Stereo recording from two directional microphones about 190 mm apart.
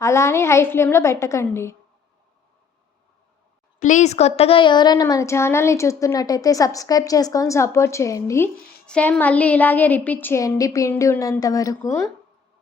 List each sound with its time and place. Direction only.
0.0 s a woman's voice: 15° left (ahead or behind)
3.8 s a woman's voice: 40° left (ahead or behind); by 12.0 s 15° left (ahead or behind)